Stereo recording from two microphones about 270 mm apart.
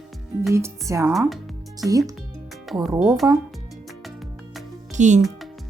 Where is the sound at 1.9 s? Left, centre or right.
Centre.